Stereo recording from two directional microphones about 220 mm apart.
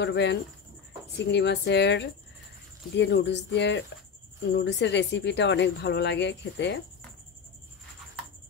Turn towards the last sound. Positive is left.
turn(degrees=50)  # may be behind; listen again after turning